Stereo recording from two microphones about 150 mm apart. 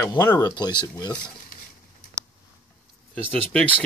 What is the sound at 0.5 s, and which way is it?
Speech, 30° left (ahead or behind).